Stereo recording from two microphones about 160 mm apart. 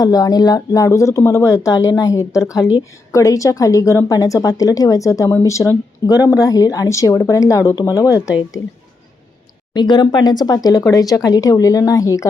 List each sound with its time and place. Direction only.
0.0 s a woman's voice: 25° left (ahead or behind)
9.7 s a woman's voice: 25° left (ahead or behind)